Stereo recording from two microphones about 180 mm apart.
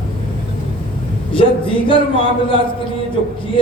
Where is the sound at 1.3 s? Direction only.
30° left (ahead or behind).